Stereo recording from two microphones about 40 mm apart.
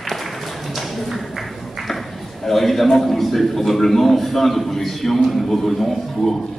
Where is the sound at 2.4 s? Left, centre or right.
Centre.